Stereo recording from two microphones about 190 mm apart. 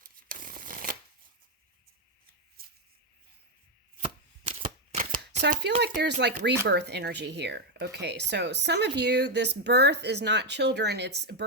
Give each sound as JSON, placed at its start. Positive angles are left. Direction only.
{"t": 0.0, "sound": "shuffling cards", "side_deg": -45}
{"t": 4.6, "sound": "shuffling cards", "side_deg": -45}
{"t": 5.4, "sound": "speech", "side_deg": -60}